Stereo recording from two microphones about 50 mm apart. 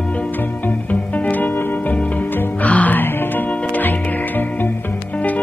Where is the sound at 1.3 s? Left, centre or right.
Left.